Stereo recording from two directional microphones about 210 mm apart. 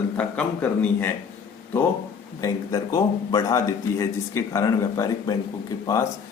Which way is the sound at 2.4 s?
15° left (ahead or behind).